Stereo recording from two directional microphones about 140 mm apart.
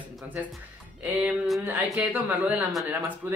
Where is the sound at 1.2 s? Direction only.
10° right (ahead or behind).